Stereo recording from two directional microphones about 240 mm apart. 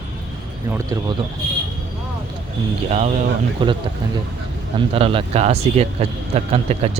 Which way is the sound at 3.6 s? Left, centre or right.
Right.